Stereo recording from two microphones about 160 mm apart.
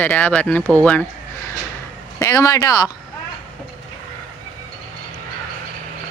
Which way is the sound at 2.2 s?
20° left (ahead or behind).